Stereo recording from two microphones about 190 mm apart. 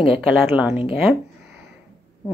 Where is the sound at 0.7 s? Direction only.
30° left (ahead or behind).